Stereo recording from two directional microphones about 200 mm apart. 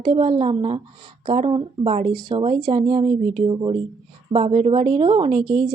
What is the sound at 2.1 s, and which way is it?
A woman's voice, 20° right (ahead or behind).